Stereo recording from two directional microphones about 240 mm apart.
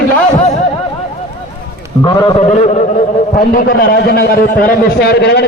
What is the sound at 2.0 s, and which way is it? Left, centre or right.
A man's voice, centre.